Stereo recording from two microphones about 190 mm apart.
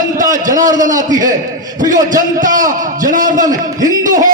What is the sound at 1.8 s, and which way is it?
A man's voice, 45° right (ahead or behind).